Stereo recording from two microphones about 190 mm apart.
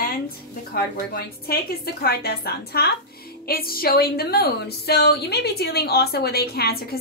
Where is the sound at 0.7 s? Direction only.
55° left (ahead or behind).